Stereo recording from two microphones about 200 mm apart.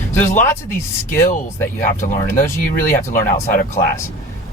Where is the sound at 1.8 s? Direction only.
40° left (ahead or behind).